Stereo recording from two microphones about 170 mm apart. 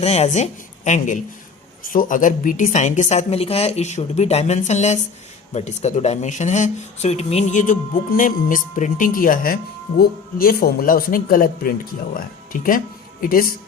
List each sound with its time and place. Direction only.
0.0 s a woman's voice: 40° left (ahead or behind)